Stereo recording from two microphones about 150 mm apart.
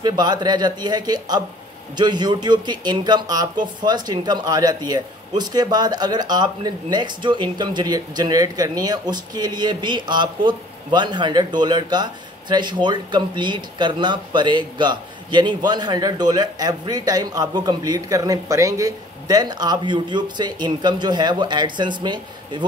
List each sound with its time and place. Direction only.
0.0 s speech: 30° right (ahead or behind)